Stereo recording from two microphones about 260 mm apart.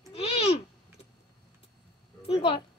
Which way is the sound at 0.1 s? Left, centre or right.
Left.